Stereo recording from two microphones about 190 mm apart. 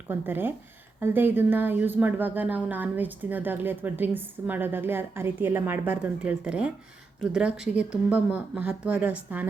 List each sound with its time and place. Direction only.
0.1 s a woman's voice: 10° right (ahead or behind)